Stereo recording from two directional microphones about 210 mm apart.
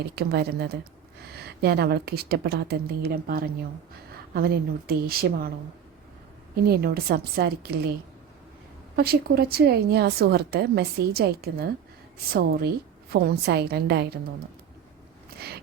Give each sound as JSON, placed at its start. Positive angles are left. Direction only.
{"t": 0.2, "sound": "a woman's voice", "side_deg": -50}
{"t": 6.7, "sound": "a woman's voice", "side_deg": -45}
{"t": 9.0, "sound": "a woman's voice", "side_deg": -45}
{"t": 15.4, "sound": "biting", "side_deg": -50}